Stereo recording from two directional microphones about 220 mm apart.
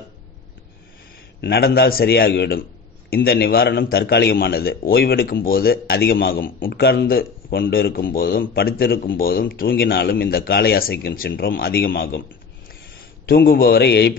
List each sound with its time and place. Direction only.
1.4 s a man's voice: 45° left (ahead or behind)
13.2 s a man's voice: 45° left (ahead or behind)